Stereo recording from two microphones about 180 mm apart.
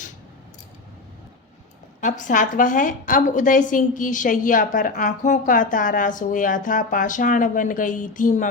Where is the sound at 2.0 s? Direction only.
45° left (ahead or behind).